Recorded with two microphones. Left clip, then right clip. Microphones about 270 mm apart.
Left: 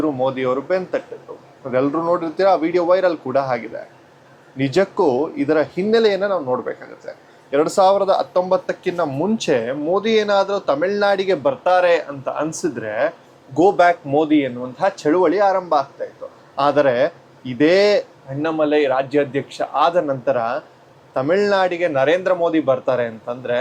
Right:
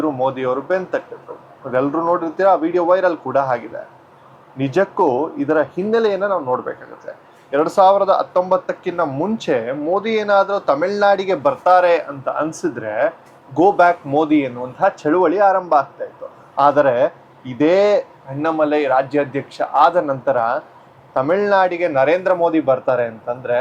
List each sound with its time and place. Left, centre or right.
0.0 s speech: right